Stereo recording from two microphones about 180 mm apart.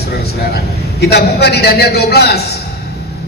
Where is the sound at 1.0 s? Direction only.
65° left (ahead or behind).